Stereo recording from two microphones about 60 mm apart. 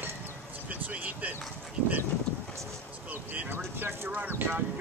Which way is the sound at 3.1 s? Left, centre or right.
Right.